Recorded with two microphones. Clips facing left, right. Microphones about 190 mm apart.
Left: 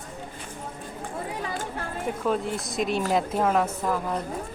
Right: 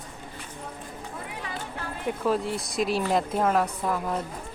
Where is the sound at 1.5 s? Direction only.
45° left (ahead or behind).